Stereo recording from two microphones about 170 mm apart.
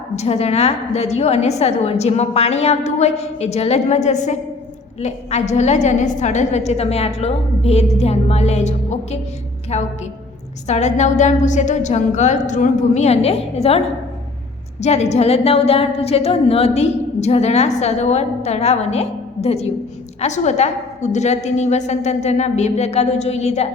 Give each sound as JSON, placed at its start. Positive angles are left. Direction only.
{"t": 0.2, "sound": "a woman's voice", "side_deg": 40}